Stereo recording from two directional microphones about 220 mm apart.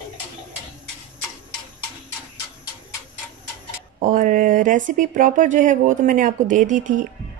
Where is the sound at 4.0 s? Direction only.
40° right (ahead or behind).